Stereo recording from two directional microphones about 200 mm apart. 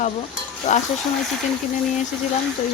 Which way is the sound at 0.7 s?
35° left (ahead or behind).